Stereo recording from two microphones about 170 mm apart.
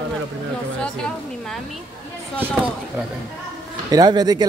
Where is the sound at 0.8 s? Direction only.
5° left (ahead or behind).